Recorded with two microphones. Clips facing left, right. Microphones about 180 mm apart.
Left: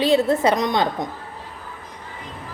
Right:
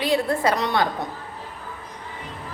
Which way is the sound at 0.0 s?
20° left (ahead or behind).